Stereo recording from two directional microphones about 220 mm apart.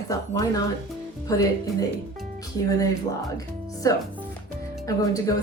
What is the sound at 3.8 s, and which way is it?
Speech, 15° left (ahead or behind).